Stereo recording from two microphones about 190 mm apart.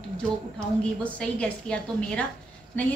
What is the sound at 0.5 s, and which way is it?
A woman's voice, 5° left (ahead or behind).